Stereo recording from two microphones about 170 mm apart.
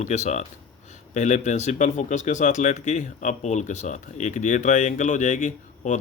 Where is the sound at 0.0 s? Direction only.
40° left (ahead or behind).